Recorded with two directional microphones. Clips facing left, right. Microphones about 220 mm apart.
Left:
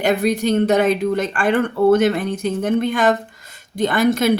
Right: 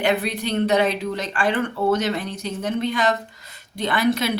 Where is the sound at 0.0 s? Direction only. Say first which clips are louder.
Left 5 dB; 45° left (ahead or behind).